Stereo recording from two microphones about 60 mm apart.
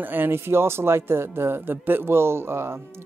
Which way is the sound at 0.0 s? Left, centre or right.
Right.